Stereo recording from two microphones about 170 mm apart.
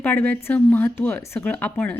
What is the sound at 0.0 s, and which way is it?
A woman's voice, 10° left (ahead or behind).